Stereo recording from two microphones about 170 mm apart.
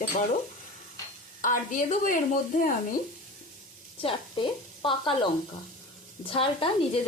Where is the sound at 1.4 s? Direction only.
50° left (ahead or behind).